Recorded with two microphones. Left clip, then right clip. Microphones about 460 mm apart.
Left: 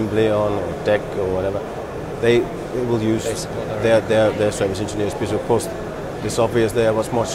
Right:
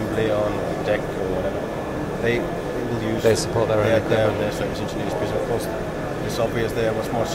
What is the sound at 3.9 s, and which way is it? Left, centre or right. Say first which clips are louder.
Speech: left 4 dB; left.